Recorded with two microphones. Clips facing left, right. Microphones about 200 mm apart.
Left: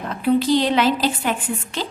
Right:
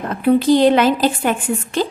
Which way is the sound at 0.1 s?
50° right (ahead or behind).